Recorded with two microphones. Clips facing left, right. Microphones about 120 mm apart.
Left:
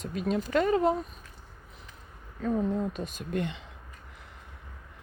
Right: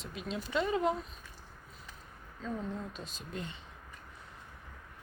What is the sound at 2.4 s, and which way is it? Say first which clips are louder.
A woman's voice: left 10 dB; 60° left (ahead or behind).